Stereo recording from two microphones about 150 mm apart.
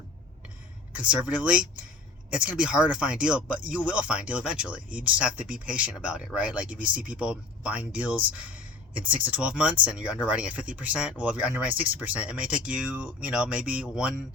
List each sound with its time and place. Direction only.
0.9 s speech: 10° right (ahead or behind)